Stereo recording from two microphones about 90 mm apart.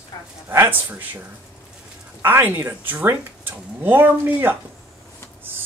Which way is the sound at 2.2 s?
20° right (ahead or behind).